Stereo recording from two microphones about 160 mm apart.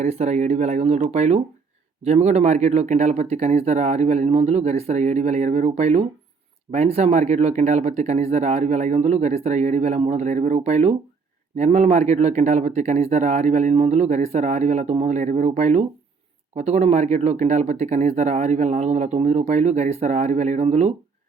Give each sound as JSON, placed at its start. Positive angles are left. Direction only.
{"t": 0.0, "sound": "speech", "side_deg": -45}